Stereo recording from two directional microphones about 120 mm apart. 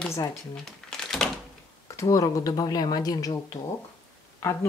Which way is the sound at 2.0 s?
30° left (ahead or behind).